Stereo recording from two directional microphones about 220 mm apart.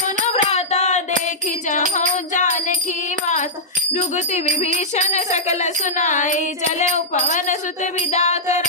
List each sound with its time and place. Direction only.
0.2 s music: 30° left (ahead or behind)
2.3 s music: 35° left (ahead or behind)
3.9 s music: 30° left (ahead or behind)